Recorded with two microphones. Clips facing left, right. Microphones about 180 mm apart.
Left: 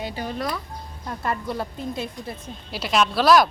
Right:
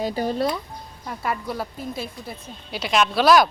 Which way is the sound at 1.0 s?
5° right (ahead or behind).